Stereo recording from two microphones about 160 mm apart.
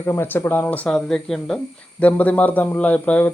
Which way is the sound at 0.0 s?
15° left (ahead or behind).